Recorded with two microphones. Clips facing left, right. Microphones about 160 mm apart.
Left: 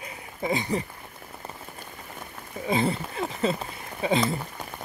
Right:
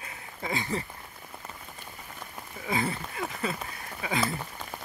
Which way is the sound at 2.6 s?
25° left (ahead or behind).